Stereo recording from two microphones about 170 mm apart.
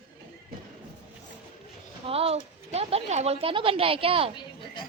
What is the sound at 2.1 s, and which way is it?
A woman's voice, 35° right (ahead or behind).